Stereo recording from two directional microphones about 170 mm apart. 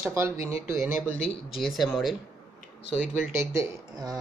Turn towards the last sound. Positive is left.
turn(degrees=-20)  # may be behind; listen again after turning